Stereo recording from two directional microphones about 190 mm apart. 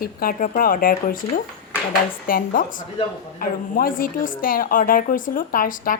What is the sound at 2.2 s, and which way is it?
A woman's voice, 45° left (ahead or behind).